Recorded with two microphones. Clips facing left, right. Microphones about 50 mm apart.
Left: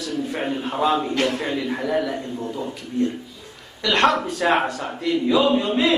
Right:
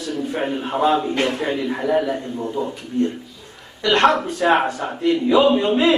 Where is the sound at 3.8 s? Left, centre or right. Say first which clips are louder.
Right 3 dB; right.